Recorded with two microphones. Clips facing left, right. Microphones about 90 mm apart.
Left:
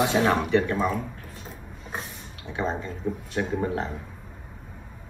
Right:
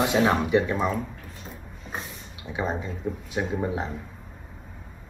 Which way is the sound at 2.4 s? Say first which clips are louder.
Even; 15° right (ahead or behind).